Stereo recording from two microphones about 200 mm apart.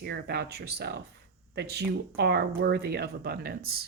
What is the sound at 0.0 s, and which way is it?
Speech, 55° right (ahead or behind).